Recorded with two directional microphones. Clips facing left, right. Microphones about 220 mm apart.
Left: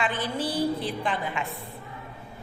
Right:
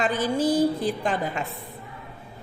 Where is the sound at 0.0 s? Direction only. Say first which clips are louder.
Right 6 dB; 45° right (ahead or behind).